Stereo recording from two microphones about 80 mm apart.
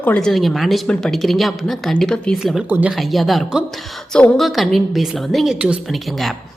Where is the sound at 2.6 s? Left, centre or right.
Right.